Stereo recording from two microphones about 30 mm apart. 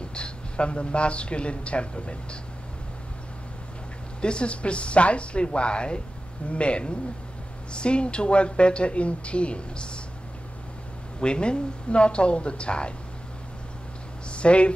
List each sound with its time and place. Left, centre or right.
0.1 s speech: left
4.2 s speech: left
11.1 s speech: left
14.3 s speech: left